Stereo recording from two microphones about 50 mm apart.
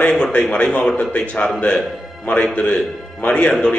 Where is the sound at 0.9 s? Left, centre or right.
Left.